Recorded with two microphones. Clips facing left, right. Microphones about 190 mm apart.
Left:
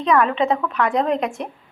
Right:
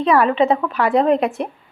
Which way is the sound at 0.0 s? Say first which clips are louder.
Right 3 dB; 5° right (ahead or behind).